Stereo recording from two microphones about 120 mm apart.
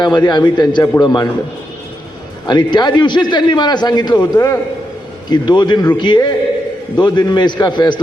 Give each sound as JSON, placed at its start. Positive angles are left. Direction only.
{"t": 0.0, "sound": "a man's voice", "side_deg": 35}
{"t": 2.5, "sound": "a man's voice", "side_deg": 40}